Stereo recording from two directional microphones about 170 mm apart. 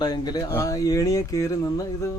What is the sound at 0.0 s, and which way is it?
Speech, 25° left (ahead or behind).